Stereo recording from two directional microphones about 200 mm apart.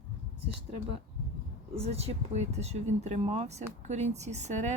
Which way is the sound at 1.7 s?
30° right (ahead or behind).